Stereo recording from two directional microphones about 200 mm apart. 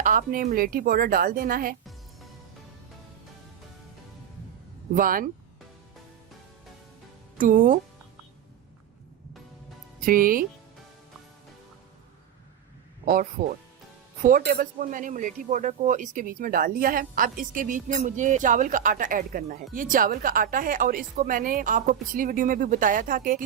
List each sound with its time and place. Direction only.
0.0 s speech: 40° right (ahead or behind)
4.9 s speech: 45° right (ahead or behind)
7.3 s speech: 45° right (ahead or behind)
10.0 s speech: 45° right (ahead or behind)
14.2 s speech: 45° right (ahead or behind)